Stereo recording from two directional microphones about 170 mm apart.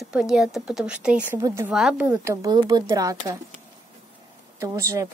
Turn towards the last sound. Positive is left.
turn(degrees=-20)  # may be behind; listen again after turning